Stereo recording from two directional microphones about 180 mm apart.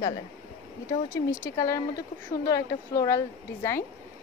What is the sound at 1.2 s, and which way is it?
Speech, 20° left (ahead or behind).